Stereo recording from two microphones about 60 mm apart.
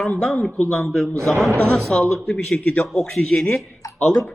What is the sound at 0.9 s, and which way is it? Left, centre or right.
A man's voice, centre.